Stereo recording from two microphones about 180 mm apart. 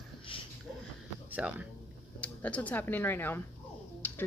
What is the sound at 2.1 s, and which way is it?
A woman's voice, 5° left (ahead or behind).